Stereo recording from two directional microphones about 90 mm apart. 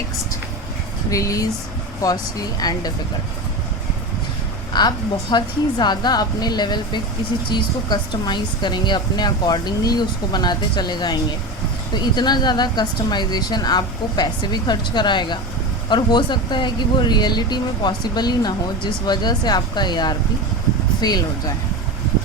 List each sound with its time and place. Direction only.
1.1 s speech: 40° left (ahead or behind)
4.7 s speech: 50° left (ahead or behind)